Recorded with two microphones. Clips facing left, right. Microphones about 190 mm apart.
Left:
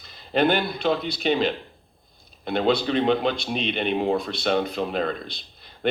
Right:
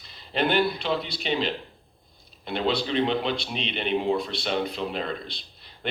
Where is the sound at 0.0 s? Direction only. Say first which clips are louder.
Left 5 dB; 50° left (ahead or behind).